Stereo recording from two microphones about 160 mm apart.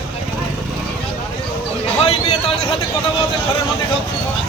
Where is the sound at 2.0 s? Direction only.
40° left (ahead or behind).